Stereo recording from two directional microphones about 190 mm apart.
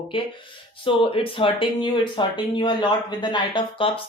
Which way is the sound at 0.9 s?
30° left (ahead or behind).